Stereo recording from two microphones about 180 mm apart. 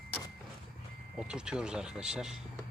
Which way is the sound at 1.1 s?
5° right (ahead or behind).